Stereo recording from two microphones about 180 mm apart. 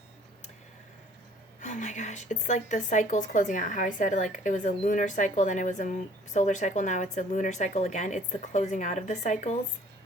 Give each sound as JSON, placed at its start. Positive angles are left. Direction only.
{"t": 1.6, "sound": "a woman's voice", "side_deg": 45}